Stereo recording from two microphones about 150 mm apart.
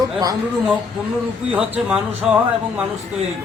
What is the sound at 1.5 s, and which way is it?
Speech, 5° right (ahead or behind).